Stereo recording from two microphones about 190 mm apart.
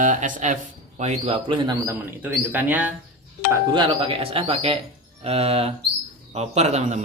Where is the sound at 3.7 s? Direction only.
30° right (ahead or behind).